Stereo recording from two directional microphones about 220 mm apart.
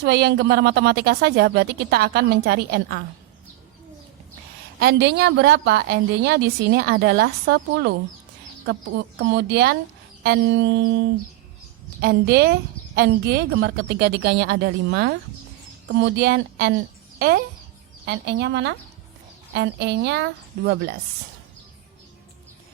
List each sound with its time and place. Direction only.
0.0 s a woman's voice: 50° right (ahead or behind)
4.8 s a woman's voice: 50° right (ahead or behind)